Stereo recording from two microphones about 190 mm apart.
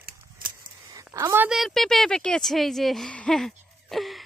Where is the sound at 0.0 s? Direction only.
50° right (ahead or behind).